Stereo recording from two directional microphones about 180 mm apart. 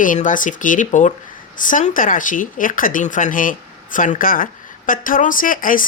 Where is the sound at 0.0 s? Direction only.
45° left (ahead or behind).